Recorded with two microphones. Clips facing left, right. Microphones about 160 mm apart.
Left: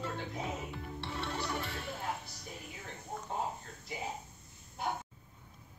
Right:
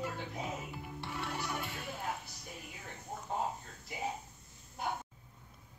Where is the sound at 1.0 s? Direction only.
25° left (ahead or behind).